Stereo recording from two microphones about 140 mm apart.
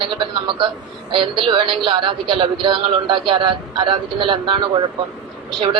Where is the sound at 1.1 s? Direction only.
40° right (ahead or behind).